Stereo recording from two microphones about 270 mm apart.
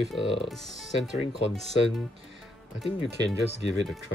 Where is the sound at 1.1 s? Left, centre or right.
Left.